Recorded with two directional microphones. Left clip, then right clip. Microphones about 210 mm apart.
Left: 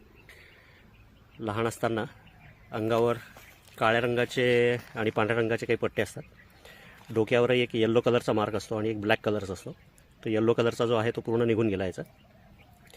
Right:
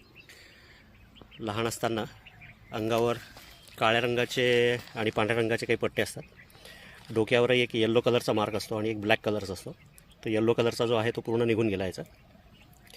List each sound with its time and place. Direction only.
1.4 s a man's voice: 25° left (ahead or behind)